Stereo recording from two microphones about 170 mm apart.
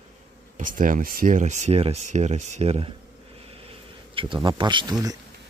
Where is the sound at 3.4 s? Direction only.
35° right (ahead or behind).